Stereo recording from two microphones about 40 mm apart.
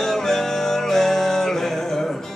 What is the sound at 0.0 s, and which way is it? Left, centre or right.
Music, centre.